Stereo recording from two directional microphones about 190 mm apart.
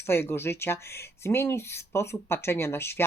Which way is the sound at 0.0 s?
10° left (ahead or behind).